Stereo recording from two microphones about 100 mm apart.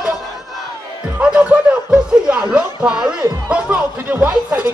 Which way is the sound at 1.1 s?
10° right (ahead or behind).